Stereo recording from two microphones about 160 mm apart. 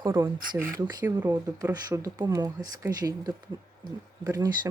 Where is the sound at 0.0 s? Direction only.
15° right (ahead or behind).